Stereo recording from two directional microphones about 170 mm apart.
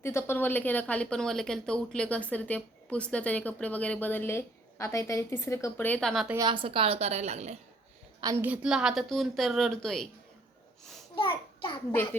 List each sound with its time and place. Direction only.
0.0 s speech: 15° left (ahead or behind)
6.4 s a woman's voice: 30° right (ahead or behind)
8.2 s a woman's voice: 20° right (ahead or behind)
8.4 s speech: 5° right (ahead or behind)
11.1 s a child's voice: 30° left (ahead or behind)